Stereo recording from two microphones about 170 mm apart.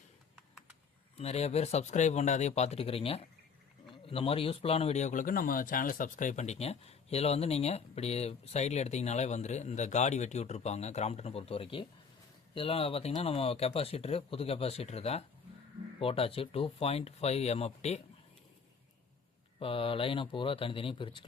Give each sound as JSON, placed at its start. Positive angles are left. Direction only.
{"t": 1.1, "sound": "speech", "side_deg": 40}
{"t": 19.5, "sound": "speech", "side_deg": 30}